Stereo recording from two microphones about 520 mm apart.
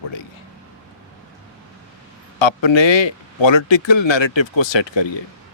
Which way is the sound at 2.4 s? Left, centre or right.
Left.